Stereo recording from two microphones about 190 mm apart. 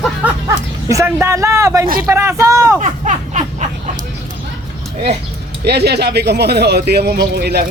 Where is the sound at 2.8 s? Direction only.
40° right (ahead or behind).